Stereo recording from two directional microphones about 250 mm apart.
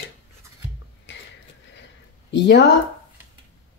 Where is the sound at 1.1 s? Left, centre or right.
Left.